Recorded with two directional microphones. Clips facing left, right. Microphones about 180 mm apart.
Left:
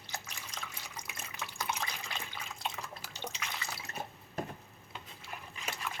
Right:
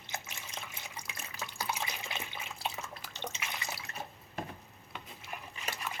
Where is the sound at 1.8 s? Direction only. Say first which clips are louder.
Right 1 dB; 25° right (ahead or behind).